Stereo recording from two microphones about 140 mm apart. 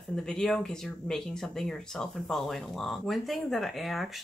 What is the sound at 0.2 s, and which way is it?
Speech, 5° left (ahead or behind).